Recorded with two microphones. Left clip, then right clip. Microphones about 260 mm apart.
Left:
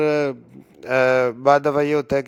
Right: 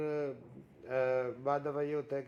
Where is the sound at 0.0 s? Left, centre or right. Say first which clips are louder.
Left 17 dB; left.